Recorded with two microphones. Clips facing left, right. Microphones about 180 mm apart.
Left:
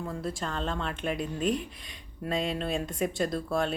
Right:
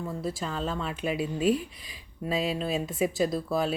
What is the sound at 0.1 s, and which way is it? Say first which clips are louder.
Speech: right 1 dB; 5° right (ahead or behind).